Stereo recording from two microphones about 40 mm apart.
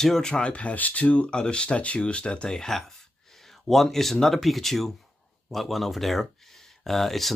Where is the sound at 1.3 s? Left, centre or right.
Left.